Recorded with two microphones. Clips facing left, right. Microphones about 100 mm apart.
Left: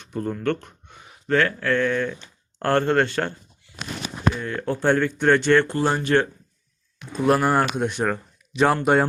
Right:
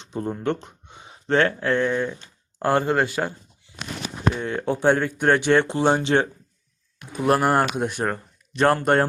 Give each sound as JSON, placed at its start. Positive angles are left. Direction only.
{"t": 0.0, "sound": "speech", "side_deg": -20}
{"t": 4.4, "sound": "speech", "side_deg": -20}
{"t": 7.1, "sound": "speech", "side_deg": -5}